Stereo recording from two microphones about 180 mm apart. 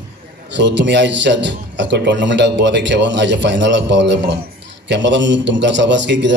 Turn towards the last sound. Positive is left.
turn(degrees=-80)